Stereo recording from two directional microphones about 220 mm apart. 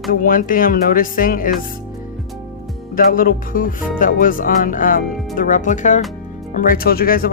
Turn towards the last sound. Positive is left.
turn(degrees=40)  # may be behind; listen again after turning